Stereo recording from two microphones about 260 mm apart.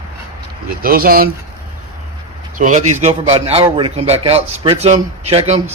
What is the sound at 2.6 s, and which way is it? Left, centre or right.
A man's voice, right.